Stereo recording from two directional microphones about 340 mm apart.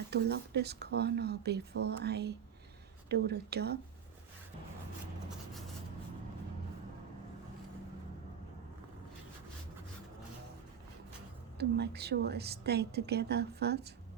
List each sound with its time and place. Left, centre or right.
0.1 s a woman's voice: right
11.5 s a woman's voice: right